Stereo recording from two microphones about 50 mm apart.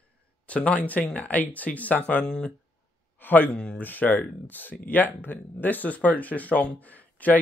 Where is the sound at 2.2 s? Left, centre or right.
Centre.